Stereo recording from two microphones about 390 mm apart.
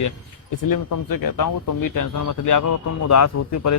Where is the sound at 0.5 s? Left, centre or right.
Left.